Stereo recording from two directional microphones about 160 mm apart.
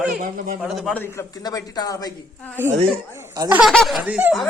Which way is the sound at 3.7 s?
Centre (ahead or behind).